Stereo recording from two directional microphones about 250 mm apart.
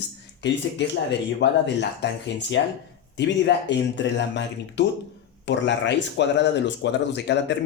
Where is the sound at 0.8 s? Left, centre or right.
Left.